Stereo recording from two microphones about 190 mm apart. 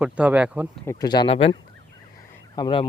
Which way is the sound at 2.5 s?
25° left (ahead or behind).